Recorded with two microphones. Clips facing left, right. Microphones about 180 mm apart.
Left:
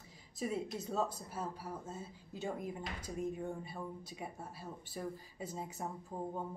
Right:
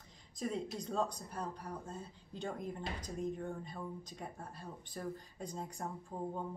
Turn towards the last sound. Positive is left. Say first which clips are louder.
# even
turn(degrees=5)  # may be behind; listen again after turning